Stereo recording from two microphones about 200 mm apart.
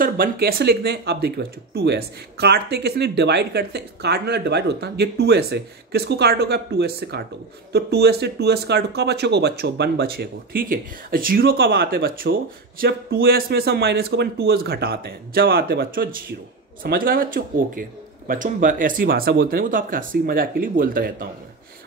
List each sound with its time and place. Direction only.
0.0 s speech: 45° right (ahead or behind)